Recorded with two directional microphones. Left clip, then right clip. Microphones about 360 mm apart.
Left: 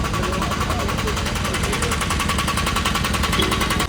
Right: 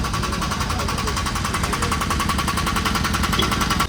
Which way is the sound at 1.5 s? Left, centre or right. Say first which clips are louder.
Left 1 dB; centre.